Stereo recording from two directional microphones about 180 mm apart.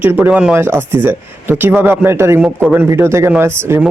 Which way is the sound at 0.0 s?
10° right (ahead or behind).